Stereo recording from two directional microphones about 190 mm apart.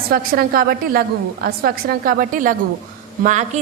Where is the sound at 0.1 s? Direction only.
50° right (ahead or behind).